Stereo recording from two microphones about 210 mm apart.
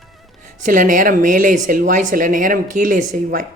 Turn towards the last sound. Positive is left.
turn(degrees=-40)  # may be behind; listen again after turning